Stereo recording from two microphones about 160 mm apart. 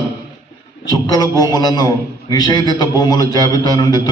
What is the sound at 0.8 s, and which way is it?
A man's voice, 25° left (ahead or behind).